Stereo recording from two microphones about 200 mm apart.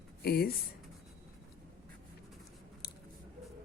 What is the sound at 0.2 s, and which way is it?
Speech, 50° left (ahead or behind).